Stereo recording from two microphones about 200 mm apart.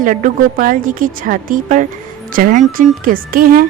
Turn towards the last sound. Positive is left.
turn(degrees=-45)  # may be behind; listen again after turning